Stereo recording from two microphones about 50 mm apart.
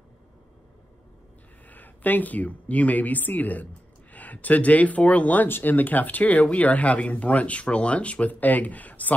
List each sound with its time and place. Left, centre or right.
1.7 s speech: left